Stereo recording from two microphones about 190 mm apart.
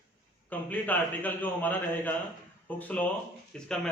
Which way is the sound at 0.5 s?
10° left (ahead or behind).